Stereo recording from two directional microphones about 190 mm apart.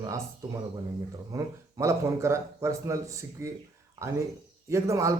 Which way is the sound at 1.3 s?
15° right (ahead or behind).